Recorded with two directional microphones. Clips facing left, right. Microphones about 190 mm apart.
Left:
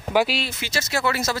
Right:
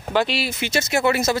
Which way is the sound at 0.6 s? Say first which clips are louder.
Right 6 dB; 20° right (ahead or behind).